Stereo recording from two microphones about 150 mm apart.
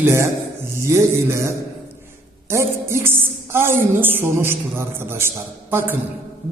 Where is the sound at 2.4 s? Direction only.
15° right (ahead or behind).